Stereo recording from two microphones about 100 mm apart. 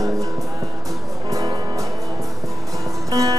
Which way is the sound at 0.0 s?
35° right (ahead or behind).